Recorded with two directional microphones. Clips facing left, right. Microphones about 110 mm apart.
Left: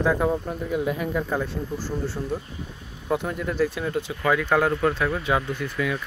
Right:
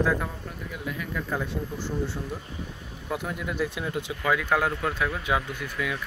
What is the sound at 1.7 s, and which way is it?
Speech, 20° right (ahead or behind).